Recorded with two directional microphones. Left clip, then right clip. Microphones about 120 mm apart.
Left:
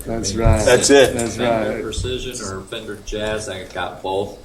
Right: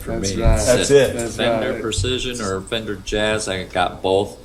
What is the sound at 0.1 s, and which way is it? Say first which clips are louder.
Speech: left 2 dB; 10° left (ahead or behind).